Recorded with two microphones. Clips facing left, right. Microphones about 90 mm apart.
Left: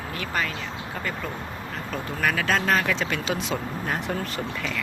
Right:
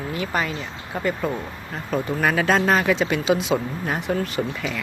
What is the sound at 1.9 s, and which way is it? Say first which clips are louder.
Speech: right 5 dB; 25° right (ahead or behind).